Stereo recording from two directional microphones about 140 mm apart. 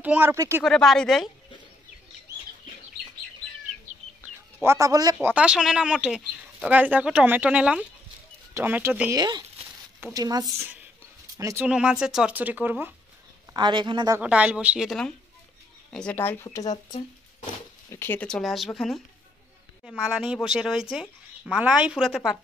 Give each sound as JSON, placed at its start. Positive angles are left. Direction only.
{"t": 0.0, "sound": "speech", "side_deg": -10}
{"t": 0.7, "sound": "speech", "side_deg": 5}
{"t": 4.6, "sound": "speech", "side_deg": -25}
{"t": 5.2, "sound": "speech", "side_deg": -10}
{"t": 9.1, "sound": "speech", "side_deg": -30}
{"t": 11.6, "sound": "speech", "side_deg": -5}
{"t": 13.5, "sound": "speech", "side_deg": -30}
{"t": 14.2, "sound": "speech", "side_deg": -10}
{"t": 17.8, "sound": "speech", "side_deg": 15}
{"t": 18.2, "sound": "speech", "side_deg": 5}